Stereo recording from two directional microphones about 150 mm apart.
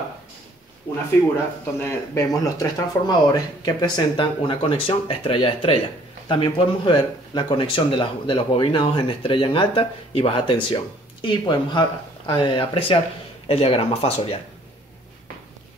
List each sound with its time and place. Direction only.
1.8 s speech: 20° left (ahead or behind); by 14.4 s 40° left (ahead or behind)